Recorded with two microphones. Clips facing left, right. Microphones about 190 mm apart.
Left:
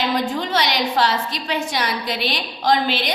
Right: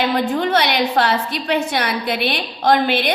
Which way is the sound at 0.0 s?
60° right (ahead or behind).